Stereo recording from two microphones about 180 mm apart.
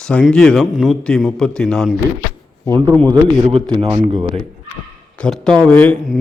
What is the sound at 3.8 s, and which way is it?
Speech, 25° right (ahead or behind).